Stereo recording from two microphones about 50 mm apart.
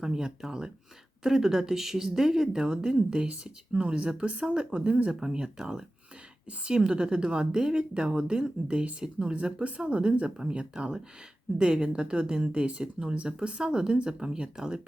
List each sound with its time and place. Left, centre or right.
0.0 s a woman's voice: centre